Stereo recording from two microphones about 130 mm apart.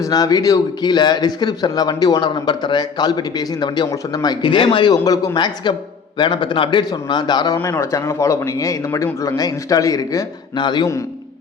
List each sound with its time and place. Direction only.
0.0 s a man's voice: 30° left (ahead or behind)